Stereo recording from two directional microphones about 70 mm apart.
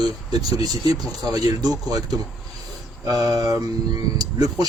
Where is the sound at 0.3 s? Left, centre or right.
Right.